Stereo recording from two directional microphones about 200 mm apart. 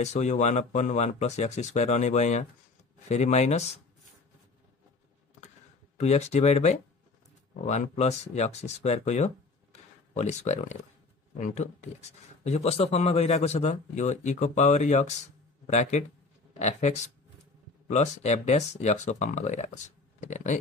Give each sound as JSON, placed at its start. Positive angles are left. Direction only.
{"t": 0.0, "sound": "speech", "side_deg": 35}
{"t": 5.9, "sound": "speech", "side_deg": 35}